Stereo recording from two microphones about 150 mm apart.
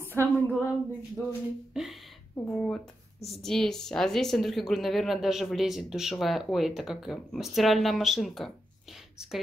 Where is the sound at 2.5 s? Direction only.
10° left (ahead or behind).